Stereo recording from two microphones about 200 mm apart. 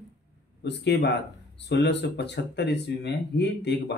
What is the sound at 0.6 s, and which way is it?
Speech, 55° left (ahead or behind).